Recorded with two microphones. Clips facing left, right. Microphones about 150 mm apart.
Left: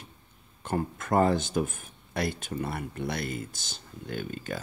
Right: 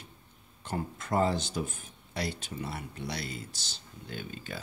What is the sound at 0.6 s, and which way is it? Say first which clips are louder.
Speech: left 5 dB; 50° left (ahead or behind).